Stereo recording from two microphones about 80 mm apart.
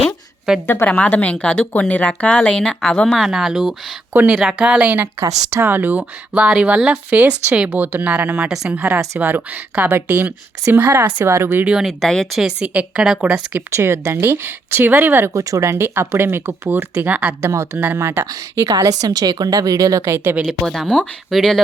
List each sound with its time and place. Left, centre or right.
0.0 s a sound: centre
0.9 s speech: centre
3.2 s speech: centre
4.1 s speech: right
4.4 s speech: centre; by 11.6 s right
11.6 s speech: centre
11.9 s speech: centre
12.4 s speech: centre
13.7 s speech: right
15.3 s speech: right
17.4 s a woman's voice: right
20.5 s speech: centre